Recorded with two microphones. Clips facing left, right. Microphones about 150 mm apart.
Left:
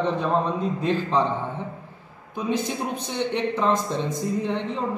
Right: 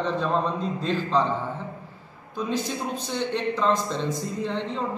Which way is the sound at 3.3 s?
15° left (ahead or behind).